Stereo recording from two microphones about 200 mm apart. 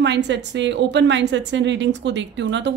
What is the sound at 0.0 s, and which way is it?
A woman's voice, 60° right (ahead or behind).